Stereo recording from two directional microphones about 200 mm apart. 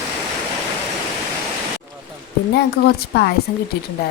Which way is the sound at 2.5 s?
55° left (ahead or behind).